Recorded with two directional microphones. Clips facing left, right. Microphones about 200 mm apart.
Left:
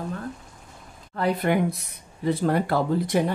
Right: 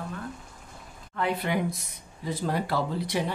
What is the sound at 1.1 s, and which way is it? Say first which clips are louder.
Speech: left 5 dB; 45° left (ahead or behind).